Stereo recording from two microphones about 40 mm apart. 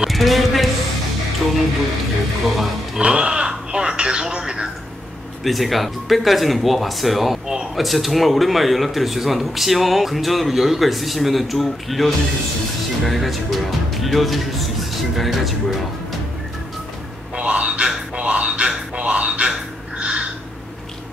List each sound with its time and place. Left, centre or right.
0.1 s music: centre
2.5 s speech: centre
3.0 s speech: right
5.4 s speech: centre
17.4 s a sound: right